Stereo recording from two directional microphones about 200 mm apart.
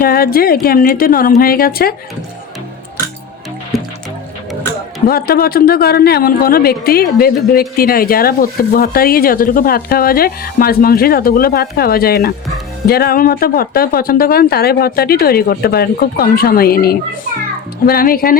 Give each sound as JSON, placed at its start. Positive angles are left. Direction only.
{"t": 0.0, "sound": "speech", "side_deg": 50}
{"t": 3.7, "sound": "music", "side_deg": 0}
{"t": 5.0, "sound": "speech", "side_deg": 50}